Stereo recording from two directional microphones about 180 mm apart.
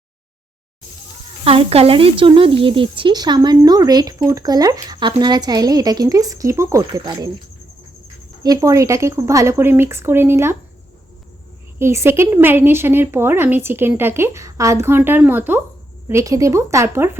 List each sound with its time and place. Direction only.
1.5 s speech: 35° right (ahead or behind)
8.4 s a woman's voice: 20° right (ahead or behind)
11.8 s a woman's voice: 15° right (ahead or behind)